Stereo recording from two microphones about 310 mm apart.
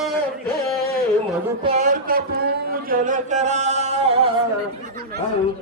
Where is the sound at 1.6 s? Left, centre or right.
Right.